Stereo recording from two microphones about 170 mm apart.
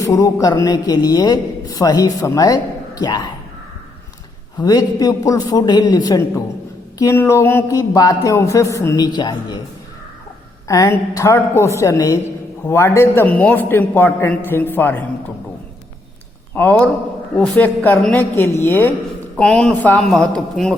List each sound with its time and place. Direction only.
0.0 s a man's voice: 20° left (ahead or behind)
4.6 s a man's voice: 20° left (ahead or behind)
10.7 s speech: 15° left (ahead or behind)
16.6 s speech: 10° left (ahead or behind)